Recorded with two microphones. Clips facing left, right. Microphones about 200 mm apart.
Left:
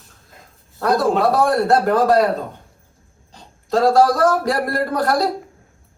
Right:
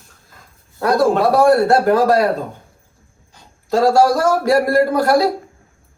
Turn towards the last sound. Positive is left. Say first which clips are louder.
# right 5 dB
turn(degrees=0)  # may be behind; listen again after turning